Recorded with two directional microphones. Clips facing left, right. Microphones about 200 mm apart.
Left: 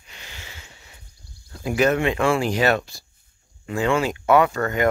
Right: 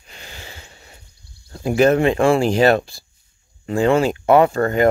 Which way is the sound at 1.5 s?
35° right (ahead or behind).